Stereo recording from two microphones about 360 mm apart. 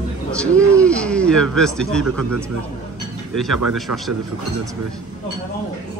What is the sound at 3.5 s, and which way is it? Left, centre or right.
Speech, right.